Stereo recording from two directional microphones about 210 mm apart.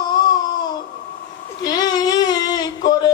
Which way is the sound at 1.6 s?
20° left (ahead or behind).